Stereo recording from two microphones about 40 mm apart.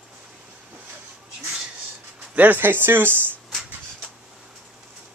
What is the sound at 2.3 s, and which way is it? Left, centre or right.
Speech, right.